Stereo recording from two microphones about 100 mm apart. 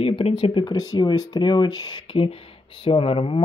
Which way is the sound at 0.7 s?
40° left (ahead or behind).